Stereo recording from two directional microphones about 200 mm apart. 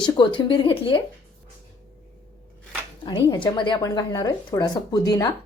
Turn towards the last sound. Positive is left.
turn(degrees=20)  # may be behind; listen again after turning